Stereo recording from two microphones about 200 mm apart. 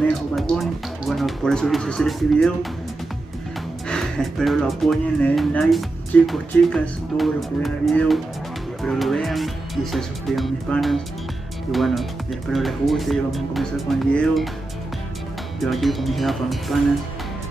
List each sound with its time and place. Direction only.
0.0 s speech: centre (ahead or behind)
3.9 s speech: centre (ahead or behind)
15.6 s speech: centre (ahead or behind)